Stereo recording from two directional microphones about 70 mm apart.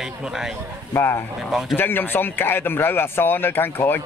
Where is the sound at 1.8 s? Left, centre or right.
Left.